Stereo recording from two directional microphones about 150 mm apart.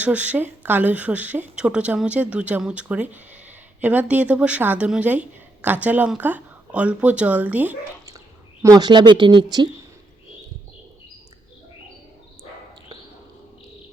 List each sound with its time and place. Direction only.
0.0 s a woman's voice: 10° right (ahead or behind)
8.6 s speech: 25° right (ahead or behind)